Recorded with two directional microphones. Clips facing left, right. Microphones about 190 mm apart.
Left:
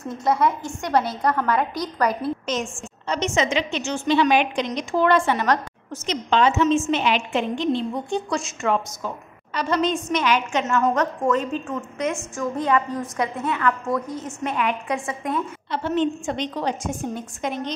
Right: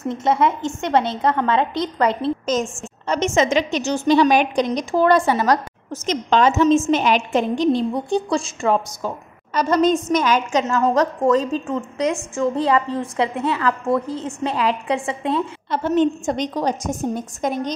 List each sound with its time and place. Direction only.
0.1 s a woman's voice: 25° right (ahead or behind)
2.4 s a woman's voice: 45° right (ahead or behind)
10.6 s a woman's voice: 30° right (ahead or behind)
15.7 s a woman's voice: 45° right (ahead or behind)